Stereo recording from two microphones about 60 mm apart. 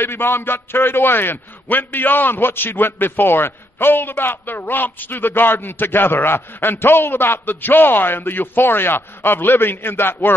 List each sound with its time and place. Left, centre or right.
0.0 s a man's voice: left